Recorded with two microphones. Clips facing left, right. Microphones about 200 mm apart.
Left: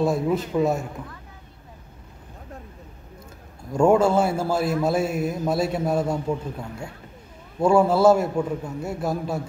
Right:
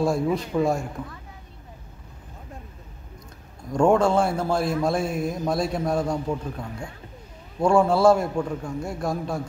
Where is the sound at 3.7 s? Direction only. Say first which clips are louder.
Left 1 dB; 5° left (ahead or behind).